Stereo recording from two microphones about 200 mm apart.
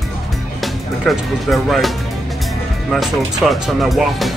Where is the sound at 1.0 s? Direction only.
Centre (ahead or behind).